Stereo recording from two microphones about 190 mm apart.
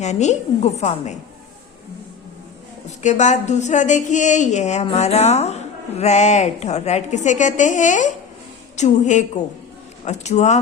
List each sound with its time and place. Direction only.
0.0 s a woman's voice: 35° left (ahead or behind)
3.0 s a woman's voice: 40° left (ahead or behind)